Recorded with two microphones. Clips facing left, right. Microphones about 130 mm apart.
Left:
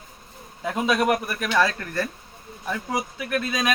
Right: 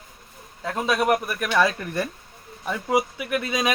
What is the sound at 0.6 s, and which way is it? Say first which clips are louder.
Speech: left 1 dB; 5° left (ahead or behind).